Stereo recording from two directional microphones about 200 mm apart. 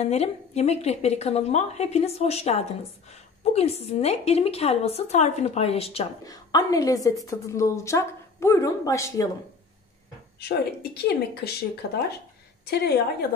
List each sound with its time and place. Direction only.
0.0 s a woman's voice: 30° left (ahead or behind)
6.2 s a woman's voice: 20° left (ahead or behind)
10.4 s a woman's voice: 55° left (ahead or behind)